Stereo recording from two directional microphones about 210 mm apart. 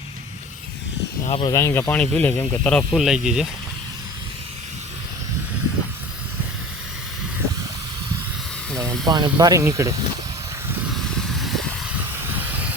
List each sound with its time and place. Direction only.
1.2 s speech: 25° left (ahead or behind); by 3.5 s centre (ahead or behind)
9.0 s speech: 20° right (ahead or behind)
10.9 s vehicle: centre (ahead or behind)